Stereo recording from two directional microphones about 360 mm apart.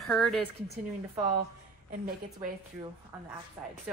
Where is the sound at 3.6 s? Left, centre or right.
Centre.